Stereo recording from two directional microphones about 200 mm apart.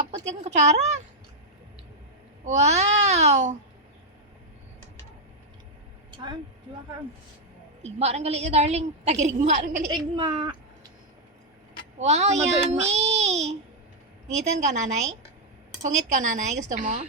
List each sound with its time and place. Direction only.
0.1 s speech: 35° right (ahead or behind)
2.4 s a child's voice: 35° right (ahead or behind)
6.1 s vehicle: 25° right (ahead or behind)
7.8 s a woman's voice: 35° right (ahead or behind)
9.9 s speech: 20° right (ahead or behind)
11.9 s a woman's voice: 35° right (ahead or behind)